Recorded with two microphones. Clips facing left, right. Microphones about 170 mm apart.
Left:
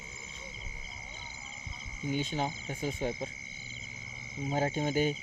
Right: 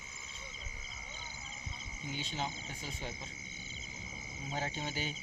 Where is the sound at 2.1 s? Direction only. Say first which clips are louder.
Left 8 dB; 50° left (ahead or behind).